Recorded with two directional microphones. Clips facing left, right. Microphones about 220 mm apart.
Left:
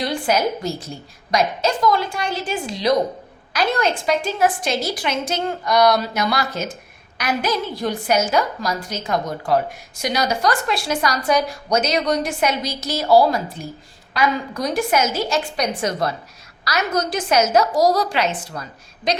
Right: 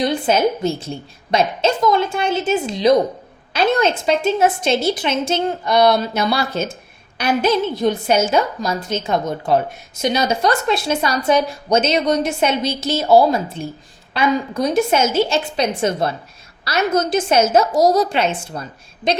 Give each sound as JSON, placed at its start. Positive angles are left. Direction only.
{"t": 0.0, "sound": "a woman's voice", "side_deg": -20}